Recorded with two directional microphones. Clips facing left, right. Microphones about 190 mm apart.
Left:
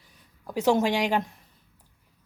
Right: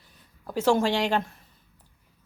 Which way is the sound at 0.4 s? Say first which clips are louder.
Even; 15° left (ahead or behind).